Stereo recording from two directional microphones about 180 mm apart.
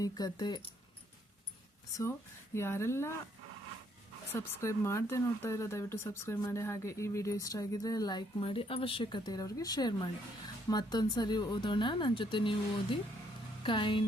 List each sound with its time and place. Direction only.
0.0 s speech: 20° left (ahead or behind)
1.9 s speech: 20° left (ahead or behind)
4.3 s speech: 15° left (ahead or behind)
13.6 s speech: 25° left (ahead or behind)